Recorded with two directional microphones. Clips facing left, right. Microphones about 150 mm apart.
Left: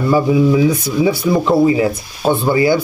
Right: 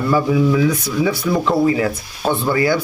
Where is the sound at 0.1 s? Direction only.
20° left (ahead or behind).